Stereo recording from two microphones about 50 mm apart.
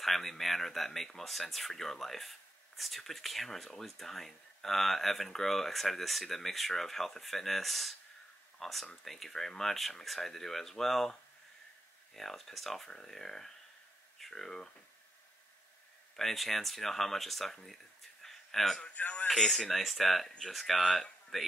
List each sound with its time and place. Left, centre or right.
0.0 s speech: centre
12.2 s speech: centre
16.2 s speech: centre
18.2 s a sound: centre
18.9 s a man's voice: left
19.2 s speech: centre